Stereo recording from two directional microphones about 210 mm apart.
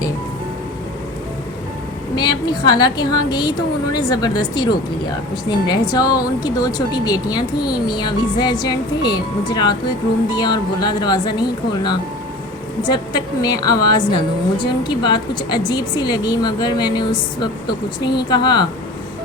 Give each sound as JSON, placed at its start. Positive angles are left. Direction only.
{"t": 2.1, "sound": "a woman's voice", "side_deg": 20}